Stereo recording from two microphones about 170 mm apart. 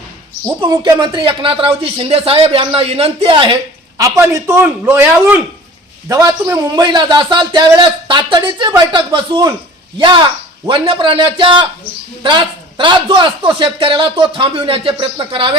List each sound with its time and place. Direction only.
0.7 s a man's voice: 25° right (ahead or behind)